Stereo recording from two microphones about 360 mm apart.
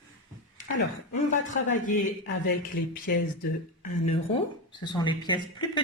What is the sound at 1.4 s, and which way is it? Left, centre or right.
Speech, left.